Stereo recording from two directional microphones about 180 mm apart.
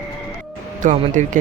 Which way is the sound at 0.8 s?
45° right (ahead or behind).